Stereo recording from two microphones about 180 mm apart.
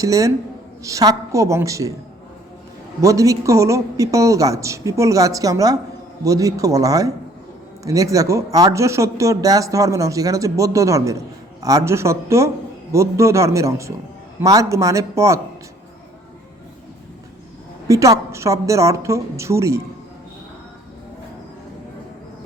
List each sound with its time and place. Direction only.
0.0 s speech: 20° right (ahead or behind)
3.0 s speech: 20° right (ahead or behind)
17.8 s speech: 20° right (ahead or behind)